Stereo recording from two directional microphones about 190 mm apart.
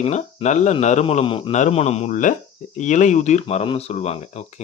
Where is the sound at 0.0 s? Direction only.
35° left (ahead or behind).